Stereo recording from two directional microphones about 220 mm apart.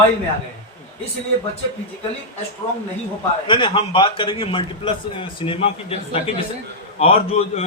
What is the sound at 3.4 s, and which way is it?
A man's voice, 20° left (ahead or behind).